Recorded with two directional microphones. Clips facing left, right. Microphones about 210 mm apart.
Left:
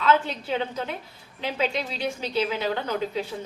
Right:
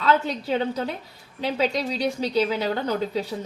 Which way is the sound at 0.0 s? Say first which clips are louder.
Right 1 dB; 35° right (ahead or behind).